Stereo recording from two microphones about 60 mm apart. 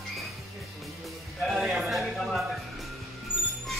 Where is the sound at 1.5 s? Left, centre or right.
Centre.